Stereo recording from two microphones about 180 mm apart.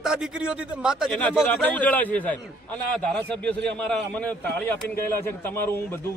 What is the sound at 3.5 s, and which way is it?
Speech, 70° right (ahead or behind).